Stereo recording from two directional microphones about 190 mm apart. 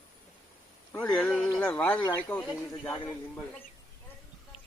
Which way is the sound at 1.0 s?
5° left (ahead or behind).